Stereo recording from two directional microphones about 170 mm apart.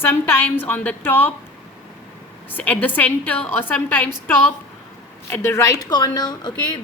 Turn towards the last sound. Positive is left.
turn(degrees=25)  # may be behind; listen again after turning